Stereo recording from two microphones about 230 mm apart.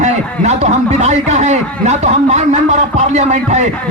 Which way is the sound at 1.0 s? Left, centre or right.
Right.